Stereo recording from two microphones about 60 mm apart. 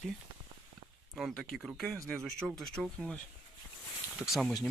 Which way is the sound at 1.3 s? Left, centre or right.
Centre.